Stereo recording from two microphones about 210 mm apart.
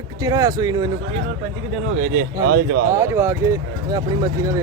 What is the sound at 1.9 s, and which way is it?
Speech, 90° right.